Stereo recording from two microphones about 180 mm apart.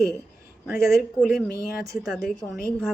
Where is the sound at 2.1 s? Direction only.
Centre (ahead or behind).